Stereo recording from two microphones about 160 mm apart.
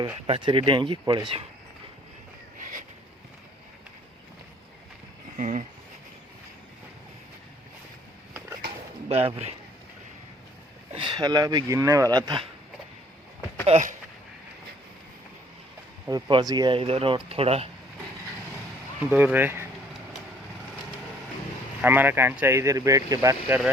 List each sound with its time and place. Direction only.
0.3 s speech: 35° right (ahead or behind)
2.6 s a sound: 55° right (ahead or behind)
5.4 s speech: 50° right (ahead or behind)
9.0 s speech: 35° right (ahead or behind)
10.9 s speech: 30° right (ahead or behind)
13.7 s speech: 45° right (ahead or behind)
16.0 s speech: 25° right (ahead or behind)
19.1 s speech: 10° right (ahead or behind)
21.8 s speech: 10° right (ahead or behind)